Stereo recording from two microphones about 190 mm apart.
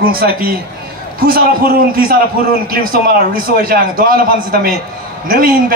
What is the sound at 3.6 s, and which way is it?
A man's voice, 50° right (ahead or behind).